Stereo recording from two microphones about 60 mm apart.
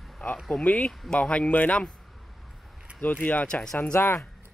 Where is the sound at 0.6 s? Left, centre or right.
Left.